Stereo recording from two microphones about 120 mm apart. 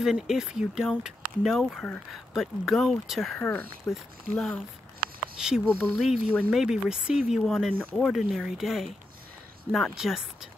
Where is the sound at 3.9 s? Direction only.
Centre (ahead or behind).